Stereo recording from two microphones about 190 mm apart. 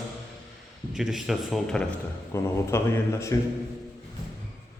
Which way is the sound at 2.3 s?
15° left (ahead or behind).